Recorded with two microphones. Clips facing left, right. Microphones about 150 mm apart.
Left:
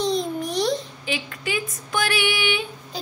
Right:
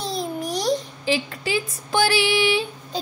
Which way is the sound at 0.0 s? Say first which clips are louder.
Left 3 dB; 5° right (ahead or behind).